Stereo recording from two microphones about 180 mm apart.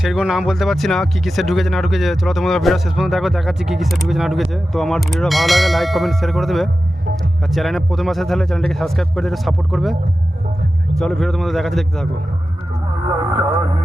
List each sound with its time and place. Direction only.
0.0 s speech: 5° right (ahead or behind)
13.1 s vehicle: 20° right (ahead or behind)